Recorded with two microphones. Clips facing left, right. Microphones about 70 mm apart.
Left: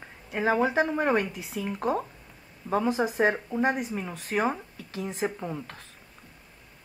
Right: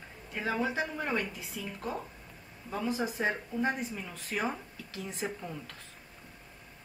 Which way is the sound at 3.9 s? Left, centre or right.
Left.